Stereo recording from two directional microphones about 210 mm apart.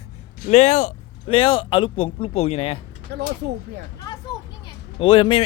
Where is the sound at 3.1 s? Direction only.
55° right (ahead or behind).